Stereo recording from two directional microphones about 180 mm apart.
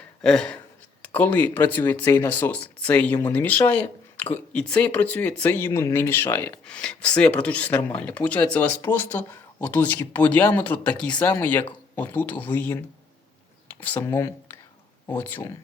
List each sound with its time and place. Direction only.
0.2 s speech: 5° left (ahead or behind)
13.8 s speech: 10° left (ahead or behind)